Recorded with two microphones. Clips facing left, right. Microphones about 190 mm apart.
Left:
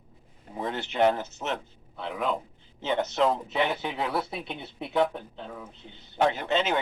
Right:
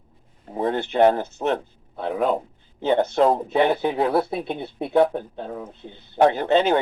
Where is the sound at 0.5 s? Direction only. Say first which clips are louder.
Right 8 dB; 50° right (ahead or behind).